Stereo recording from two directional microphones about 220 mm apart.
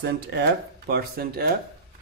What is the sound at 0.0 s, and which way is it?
A man's voice, 50° right (ahead or behind).